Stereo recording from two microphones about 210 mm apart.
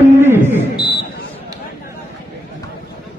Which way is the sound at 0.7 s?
20° left (ahead or behind).